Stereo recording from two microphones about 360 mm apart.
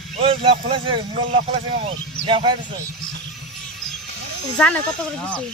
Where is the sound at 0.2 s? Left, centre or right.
Centre.